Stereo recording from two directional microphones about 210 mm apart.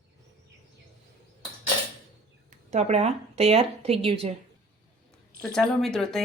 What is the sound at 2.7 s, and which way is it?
A woman's voice, 30° right (ahead or behind).